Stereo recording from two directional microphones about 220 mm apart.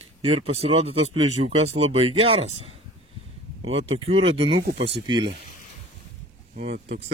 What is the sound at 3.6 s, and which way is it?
Speech, 25° right (ahead or behind).